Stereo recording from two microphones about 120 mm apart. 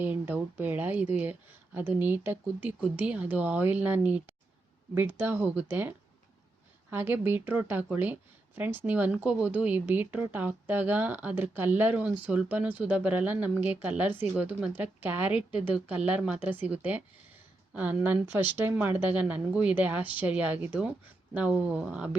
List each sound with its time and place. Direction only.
0.0 s speech: 15° right (ahead or behind)
6.9 s speech: 15° right (ahead or behind)